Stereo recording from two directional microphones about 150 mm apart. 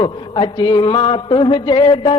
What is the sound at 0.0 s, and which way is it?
A man's voice, 30° left (ahead or behind).